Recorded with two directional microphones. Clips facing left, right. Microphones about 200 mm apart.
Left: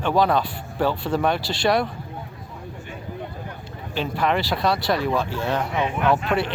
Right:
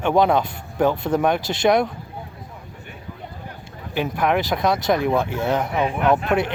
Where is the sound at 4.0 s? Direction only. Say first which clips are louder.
Right 2 dB; 15° right (ahead or behind).